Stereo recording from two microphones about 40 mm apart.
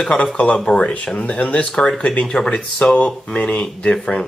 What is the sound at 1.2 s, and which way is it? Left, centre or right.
Speech, left.